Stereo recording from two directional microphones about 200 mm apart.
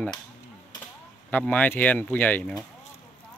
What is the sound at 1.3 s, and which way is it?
A man's voice, 10° left (ahead or behind).